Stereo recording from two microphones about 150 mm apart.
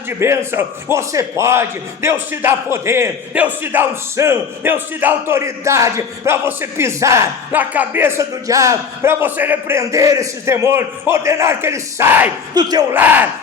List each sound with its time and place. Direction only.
0.2 s a man's voice: 15° right (ahead or behind)
12.5 s speech: 25° right (ahead or behind)
12.9 s a man's voice: 10° right (ahead or behind)